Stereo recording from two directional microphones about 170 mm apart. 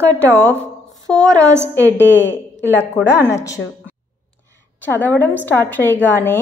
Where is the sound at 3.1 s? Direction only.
15° left (ahead or behind).